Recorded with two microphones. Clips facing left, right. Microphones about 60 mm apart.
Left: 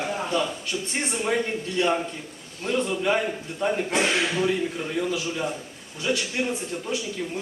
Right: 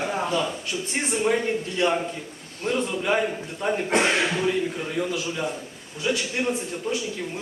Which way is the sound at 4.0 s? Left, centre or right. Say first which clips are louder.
Right 1 dB; right.